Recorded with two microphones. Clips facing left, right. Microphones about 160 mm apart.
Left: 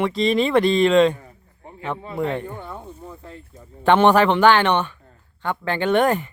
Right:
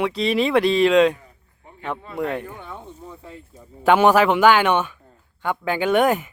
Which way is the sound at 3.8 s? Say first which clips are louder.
Even; 5° right (ahead or behind).